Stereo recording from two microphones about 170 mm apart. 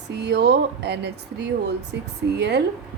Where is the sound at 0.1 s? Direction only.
85° right.